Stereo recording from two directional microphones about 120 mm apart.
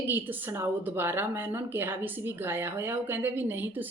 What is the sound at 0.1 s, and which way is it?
A woman's voice, 15° right (ahead or behind).